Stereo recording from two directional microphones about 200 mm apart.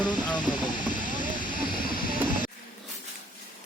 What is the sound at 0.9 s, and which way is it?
Vehicle, 40° left (ahead or behind).